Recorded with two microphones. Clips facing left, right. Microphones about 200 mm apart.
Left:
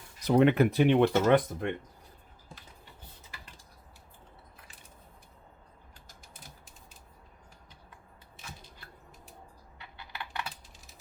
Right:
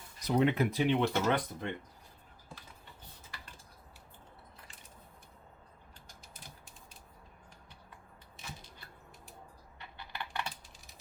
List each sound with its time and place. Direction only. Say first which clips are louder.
0.3 s speech: left 6 dB; 65° left (ahead or behind)